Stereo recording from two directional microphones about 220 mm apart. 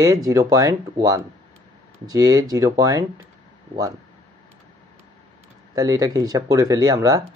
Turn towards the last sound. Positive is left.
turn(degrees=-15)  # may be behind; listen again after turning